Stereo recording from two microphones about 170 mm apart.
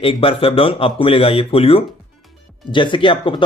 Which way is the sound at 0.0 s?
30° left (ahead or behind).